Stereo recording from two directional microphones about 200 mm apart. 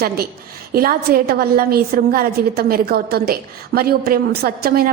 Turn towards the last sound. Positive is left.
turn(degrees=-50)  # may be behind; listen again after turning